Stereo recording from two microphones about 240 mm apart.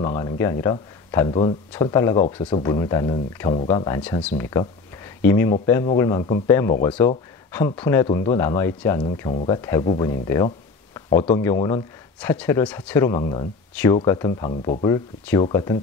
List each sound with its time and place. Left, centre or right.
0.0 s speech: centre
14.5 s speech: left
14.9 s speech: centre